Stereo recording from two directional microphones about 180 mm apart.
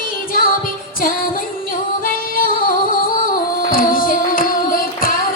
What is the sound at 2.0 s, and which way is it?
Music, 50° left (ahead or behind).